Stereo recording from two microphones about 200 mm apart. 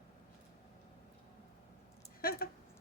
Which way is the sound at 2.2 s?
50° left (ahead or behind).